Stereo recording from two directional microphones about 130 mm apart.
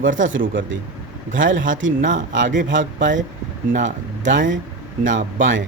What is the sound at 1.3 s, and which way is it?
Speech, 90° right.